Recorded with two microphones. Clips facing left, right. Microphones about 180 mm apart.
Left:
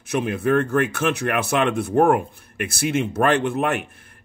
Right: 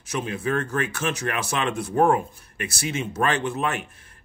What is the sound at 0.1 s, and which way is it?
Speech, 60° left (ahead or behind).